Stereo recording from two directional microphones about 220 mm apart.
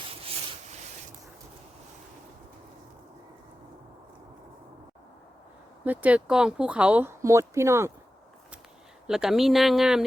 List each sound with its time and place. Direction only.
5.8 s speech: 5° right (ahead or behind)
9.0 s speech: centre (ahead or behind)